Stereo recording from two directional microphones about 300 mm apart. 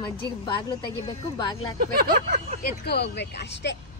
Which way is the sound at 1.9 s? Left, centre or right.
Right.